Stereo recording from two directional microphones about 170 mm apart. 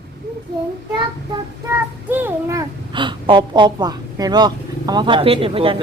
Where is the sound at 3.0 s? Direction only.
30° right (ahead or behind).